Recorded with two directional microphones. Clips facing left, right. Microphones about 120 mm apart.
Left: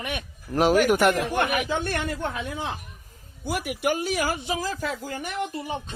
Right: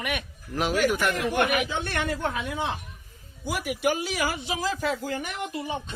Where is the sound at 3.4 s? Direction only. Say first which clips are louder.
Even; 50° left (ahead or behind).